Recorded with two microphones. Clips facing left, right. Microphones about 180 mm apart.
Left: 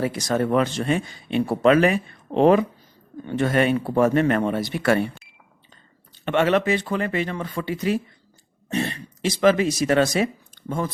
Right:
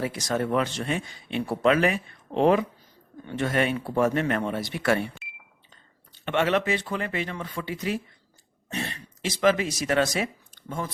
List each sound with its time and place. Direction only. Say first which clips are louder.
0.0 s speech: left 4 dB; 45° left (ahead or behind)
6.2 s speech: left 4 dB; 45° left (ahead or behind)